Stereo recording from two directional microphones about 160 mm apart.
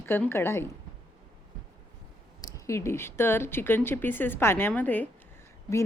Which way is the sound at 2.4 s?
20° left (ahead or behind).